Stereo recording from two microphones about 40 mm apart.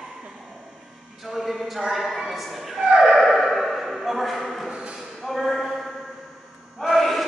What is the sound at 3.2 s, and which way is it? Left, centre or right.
Dog, centre.